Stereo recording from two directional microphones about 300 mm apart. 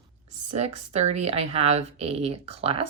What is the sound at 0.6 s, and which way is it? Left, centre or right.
Speech, right.